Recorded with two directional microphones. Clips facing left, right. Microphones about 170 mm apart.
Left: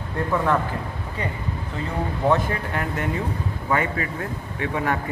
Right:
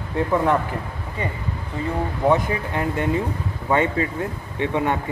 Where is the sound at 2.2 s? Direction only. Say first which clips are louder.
Right 2 dB; 15° right (ahead or behind).